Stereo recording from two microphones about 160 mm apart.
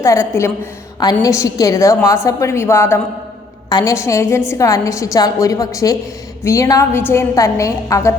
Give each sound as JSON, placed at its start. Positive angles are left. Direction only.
{"t": 0.0, "sound": "a woman's voice", "side_deg": 20}